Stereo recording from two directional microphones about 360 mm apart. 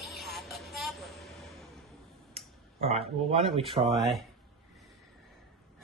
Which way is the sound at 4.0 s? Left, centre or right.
Centre.